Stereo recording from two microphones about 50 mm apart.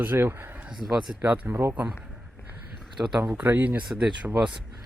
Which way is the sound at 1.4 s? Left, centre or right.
Right.